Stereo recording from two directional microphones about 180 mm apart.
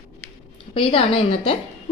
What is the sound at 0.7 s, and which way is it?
Speech, 30° left (ahead or behind).